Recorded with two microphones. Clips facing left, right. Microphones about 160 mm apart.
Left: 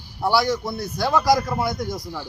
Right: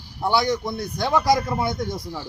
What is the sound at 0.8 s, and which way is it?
Speech, 20° right (ahead or behind).